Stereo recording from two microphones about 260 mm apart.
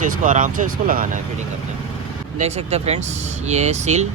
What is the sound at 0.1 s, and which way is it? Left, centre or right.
Speech, right.